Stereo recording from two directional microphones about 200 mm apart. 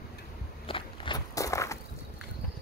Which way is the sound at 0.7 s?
20° left (ahead or behind).